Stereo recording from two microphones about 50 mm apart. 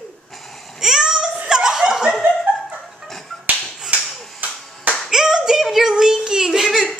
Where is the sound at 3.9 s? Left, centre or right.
Right.